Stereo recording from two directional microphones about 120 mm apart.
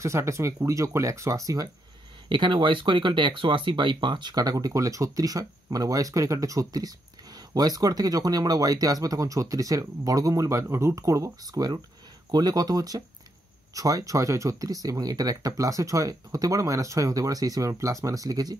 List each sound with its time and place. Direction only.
0.0 s speech: 25° right (ahead or behind)
2.2 s speech: 40° right (ahead or behind)